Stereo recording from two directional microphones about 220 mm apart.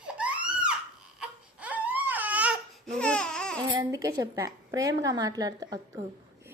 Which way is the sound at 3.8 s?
15° right (ahead or behind).